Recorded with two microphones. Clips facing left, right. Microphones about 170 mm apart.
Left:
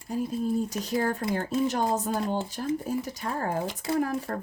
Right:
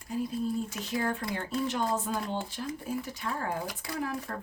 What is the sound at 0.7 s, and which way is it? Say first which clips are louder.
Speech: left 4 dB; 40° left (ahead or behind).